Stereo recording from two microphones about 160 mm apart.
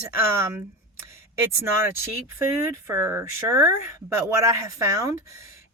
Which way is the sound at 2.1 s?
15° right (ahead or behind).